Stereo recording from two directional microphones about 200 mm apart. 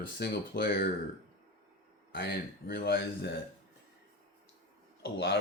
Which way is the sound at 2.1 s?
50° left (ahead or behind).